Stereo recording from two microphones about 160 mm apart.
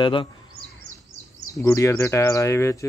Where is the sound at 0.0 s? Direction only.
30° left (ahead or behind).